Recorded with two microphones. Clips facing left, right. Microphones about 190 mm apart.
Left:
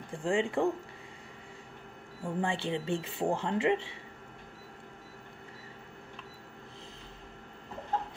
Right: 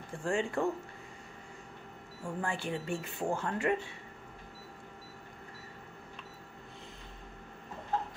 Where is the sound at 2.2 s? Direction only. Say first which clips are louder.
Left 4 dB; 25° left (ahead or behind).